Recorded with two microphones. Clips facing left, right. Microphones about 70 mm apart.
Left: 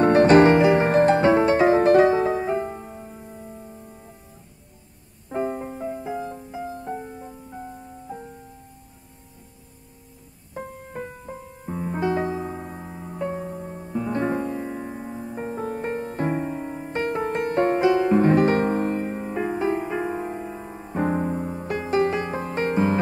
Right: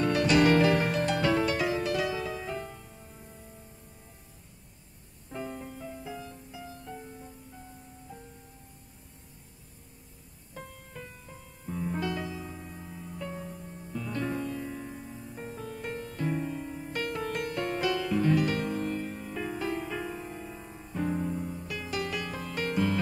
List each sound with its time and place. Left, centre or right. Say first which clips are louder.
0.0 s music: left 10 dB; left
5.3 s music: left 11 dB; left
10.5 s music: left 10 dB; left